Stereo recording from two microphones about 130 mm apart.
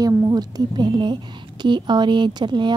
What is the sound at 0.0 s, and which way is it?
A woman's voice, 30° right (ahead or behind).